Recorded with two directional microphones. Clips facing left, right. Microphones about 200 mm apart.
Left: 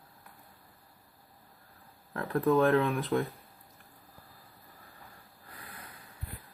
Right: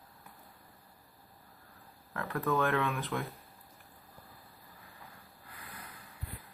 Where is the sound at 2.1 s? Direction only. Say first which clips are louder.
Left 6 dB; 30° left (ahead or behind).